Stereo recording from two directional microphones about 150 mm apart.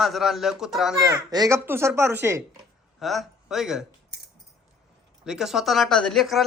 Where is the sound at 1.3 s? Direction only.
25° right (ahead or behind).